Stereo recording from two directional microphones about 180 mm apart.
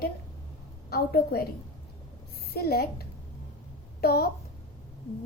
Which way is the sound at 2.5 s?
60° left (ahead or behind).